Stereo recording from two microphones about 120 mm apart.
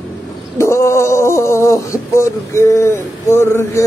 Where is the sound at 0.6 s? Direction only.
25° left (ahead or behind).